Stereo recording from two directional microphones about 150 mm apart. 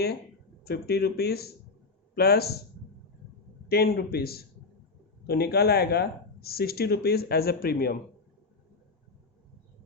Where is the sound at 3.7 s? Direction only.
90° left.